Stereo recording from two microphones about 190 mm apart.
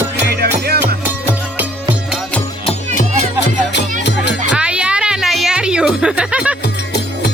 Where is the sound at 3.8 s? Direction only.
65° left (ahead or behind).